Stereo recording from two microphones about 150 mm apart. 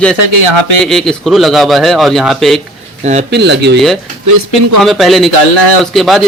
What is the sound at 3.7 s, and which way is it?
A man's voice, centre (ahead or behind).